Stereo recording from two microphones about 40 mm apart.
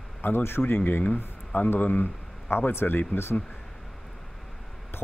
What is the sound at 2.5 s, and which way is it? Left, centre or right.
Speech, left.